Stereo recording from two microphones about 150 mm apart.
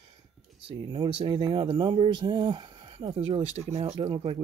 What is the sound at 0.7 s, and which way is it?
Speech, 30° right (ahead or behind).